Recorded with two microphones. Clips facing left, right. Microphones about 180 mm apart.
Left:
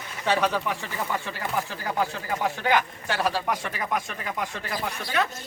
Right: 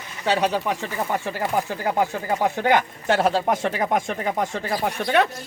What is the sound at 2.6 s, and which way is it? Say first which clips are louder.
Speech: right 4 dB; 20° right (ahead or behind).